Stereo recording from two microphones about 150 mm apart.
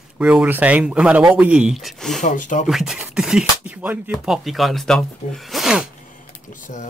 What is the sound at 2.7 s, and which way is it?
Speech, centre (ahead or behind).